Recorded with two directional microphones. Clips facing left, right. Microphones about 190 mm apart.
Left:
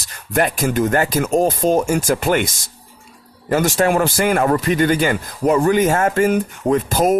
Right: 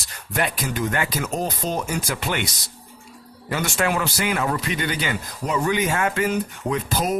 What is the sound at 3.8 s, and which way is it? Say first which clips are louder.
Speech: left 4 dB; 45° left (ahead or behind).